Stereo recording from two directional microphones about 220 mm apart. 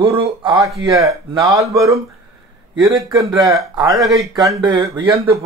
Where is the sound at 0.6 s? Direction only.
Centre (ahead or behind).